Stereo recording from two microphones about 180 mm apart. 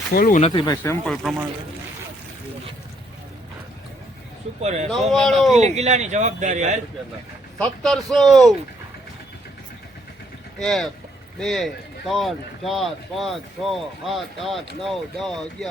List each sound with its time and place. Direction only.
0.1 s speech: 50° left (ahead or behind)
0.5 s speech: 20° left (ahead or behind)
1.0 s speech: centre (ahead or behind)
4.6 s speech: 40° right (ahead or behind)
5.1 s speech: centre (ahead or behind)
5.5 s speech: 40° right (ahead or behind)
7.6 s speech: 5° left (ahead or behind)
10.6 s speech: centre (ahead or behind)